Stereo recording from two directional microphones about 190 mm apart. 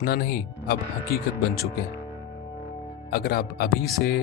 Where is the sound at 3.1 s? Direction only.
55° left (ahead or behind).